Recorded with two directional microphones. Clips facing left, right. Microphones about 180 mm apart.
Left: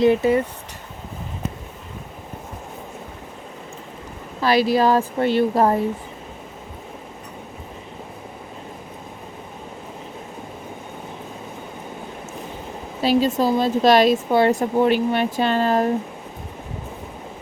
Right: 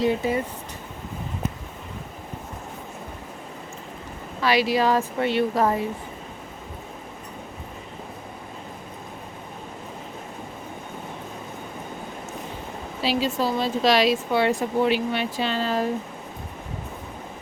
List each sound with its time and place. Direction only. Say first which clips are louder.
4.4 s a woman's voice: left 4 dB; 40° left (ahead or behind)
13.0 s speech: left 6 dB; 45° left (ahead or behind)